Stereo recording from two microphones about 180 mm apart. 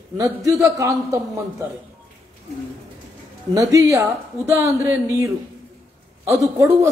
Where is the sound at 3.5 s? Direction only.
20° right (ahead or behind).